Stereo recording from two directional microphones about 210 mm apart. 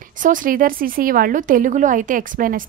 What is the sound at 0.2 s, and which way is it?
A woman's voice, 40° right (ahead or behind).